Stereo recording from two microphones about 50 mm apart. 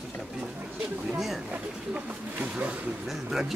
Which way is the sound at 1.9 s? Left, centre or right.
Right.